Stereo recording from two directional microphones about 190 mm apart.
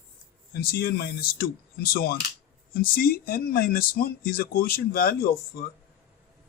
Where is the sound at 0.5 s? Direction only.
55° left (ahead or behind).